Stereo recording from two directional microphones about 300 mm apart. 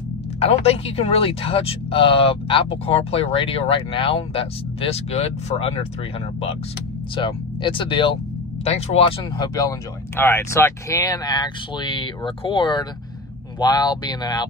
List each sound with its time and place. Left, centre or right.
0.4 s speech: centre
7.2 s speech: centre